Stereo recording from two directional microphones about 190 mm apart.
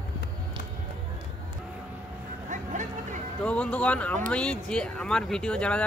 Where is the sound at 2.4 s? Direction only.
40° right (ahead or behind).